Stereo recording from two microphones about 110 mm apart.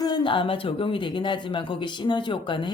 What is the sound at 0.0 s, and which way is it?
A woman's voice, 45° left (ahead or behind).